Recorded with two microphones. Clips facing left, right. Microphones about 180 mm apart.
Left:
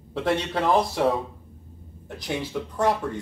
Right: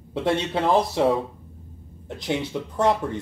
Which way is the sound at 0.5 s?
20° right (ahead or behind).